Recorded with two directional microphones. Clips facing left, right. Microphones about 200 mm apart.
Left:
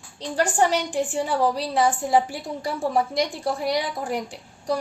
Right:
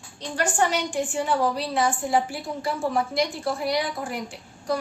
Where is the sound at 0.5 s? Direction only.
35° left (ahead or behind).